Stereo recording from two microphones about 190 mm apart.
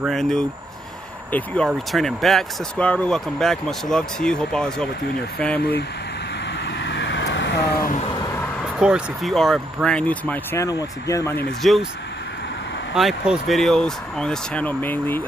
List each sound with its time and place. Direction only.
0.0 s speech: centre (ahead or behind)
6.6 s vehicle: 70° left (ahead or behind)
8.7 s speech: 5° right (ahead or behind); by 11.4 s 15° left (ahead or behind)
11.6 s speech: centre (ahead or behind)
12.9 s speech: 5° right (ahead or behind)